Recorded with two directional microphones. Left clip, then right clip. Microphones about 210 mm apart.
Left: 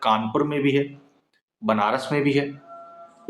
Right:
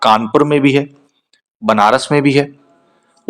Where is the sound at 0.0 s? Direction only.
45° right (ahead or behind).